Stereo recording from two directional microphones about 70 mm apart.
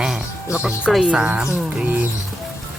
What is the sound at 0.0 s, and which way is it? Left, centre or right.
Music, centre.